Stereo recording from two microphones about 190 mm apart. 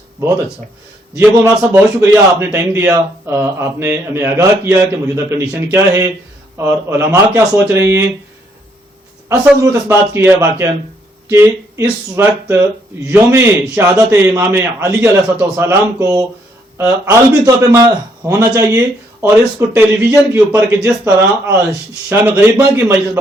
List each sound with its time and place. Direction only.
1.1 s a man's voice: 10° right (ahead or behind)
9.3 s a man's voice: 10° right (ahead or behind)